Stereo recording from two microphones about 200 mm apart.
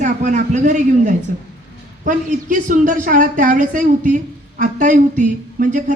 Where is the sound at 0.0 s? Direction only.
40° right (ahead or behind).